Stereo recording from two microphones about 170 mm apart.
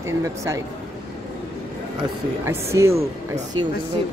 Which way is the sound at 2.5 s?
15° right (ahead or behind).